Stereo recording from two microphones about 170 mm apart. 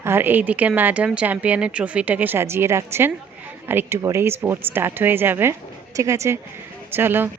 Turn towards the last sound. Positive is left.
turn(degrees=-10)  # may be behind; listen again after turning